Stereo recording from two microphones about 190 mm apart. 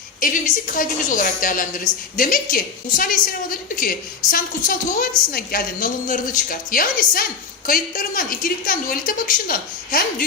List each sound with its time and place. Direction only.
0.2 s a woman's voice: 45° left (ahead or behind)